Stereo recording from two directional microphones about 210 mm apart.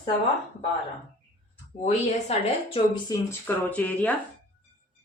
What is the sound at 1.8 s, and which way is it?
Speech, 30° left (ahead or behind).